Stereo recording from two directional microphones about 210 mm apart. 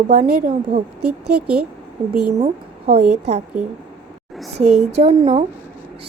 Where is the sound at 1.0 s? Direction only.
90° right.